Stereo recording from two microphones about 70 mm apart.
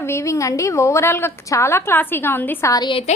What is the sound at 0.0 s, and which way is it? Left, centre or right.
A woman's voice, left.